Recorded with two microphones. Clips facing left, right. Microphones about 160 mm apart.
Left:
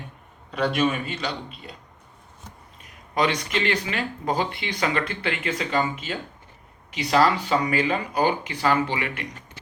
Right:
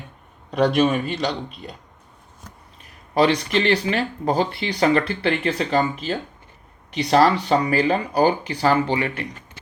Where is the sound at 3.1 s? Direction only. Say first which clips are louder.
Right 6 dB; 30° right (ahead or behind).